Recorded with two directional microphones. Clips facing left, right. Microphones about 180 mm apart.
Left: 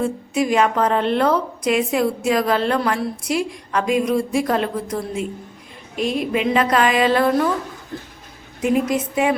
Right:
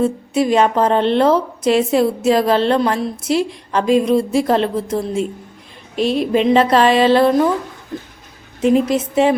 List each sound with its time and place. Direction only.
0.0 s a woman's voice: 30° right (ahead or behind)
8.7 s a woman's voice: 30° right (ahead or behind)